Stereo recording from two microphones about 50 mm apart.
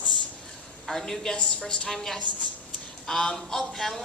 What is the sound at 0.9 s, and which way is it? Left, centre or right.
A woman's voice, centre.